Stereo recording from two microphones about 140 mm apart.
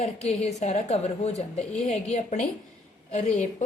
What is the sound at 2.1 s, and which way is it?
A woman's voice, 60° left (ahead or behind).